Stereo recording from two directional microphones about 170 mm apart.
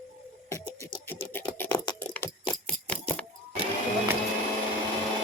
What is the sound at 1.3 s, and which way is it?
Scratch, 10° left (ahead or behind).